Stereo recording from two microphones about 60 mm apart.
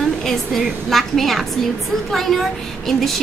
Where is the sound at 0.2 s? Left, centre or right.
Centre.